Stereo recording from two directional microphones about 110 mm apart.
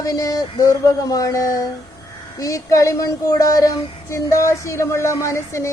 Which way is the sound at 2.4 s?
30° left (ahead or behind).